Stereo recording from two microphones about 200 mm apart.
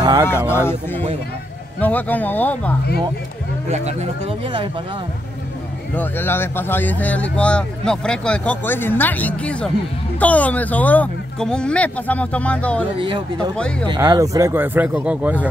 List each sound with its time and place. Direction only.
0.0 s speech: 20° right (ahead or behind)
0.5 s speech: 10° left (ahead or behind)
3.6 s speech: 35° right (ahead or behind)
5.9 s speech: 10° left (ahead or behind)
13.0 s speech: 25° right (ahead or behind)
13.6 s speech: 5° left (ahead or behind)
13.9 s speech: 15° right (ahead or behind)